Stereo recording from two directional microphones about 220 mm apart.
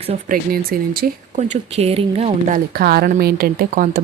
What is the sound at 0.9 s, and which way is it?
Speech, 40° right (ahead or behind).